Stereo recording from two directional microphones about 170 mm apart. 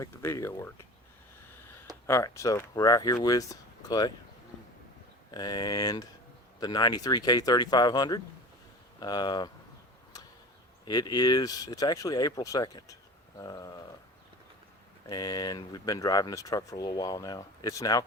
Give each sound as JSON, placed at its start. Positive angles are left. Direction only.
{"t": 0.0, "sound": "speech", "side_deg": 15}
{"t": 2.0, "sound": "speech", "side_deg": 15}
{"t": 5.3, "sound": "speech", "side_deg": 25}
{"t": 10.8, "sound": "speech", "side_deg": 25}
{"t": 15.0, "sound": "speech", "side_deg": 20}